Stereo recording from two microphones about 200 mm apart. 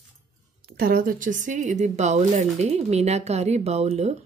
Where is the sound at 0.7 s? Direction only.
50° right (ahead or behind); by 4.2 s 30° right (ahead or behind).